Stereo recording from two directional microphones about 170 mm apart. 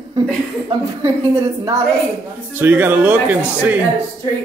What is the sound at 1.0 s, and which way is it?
Speech, 15° right (ahead or behind).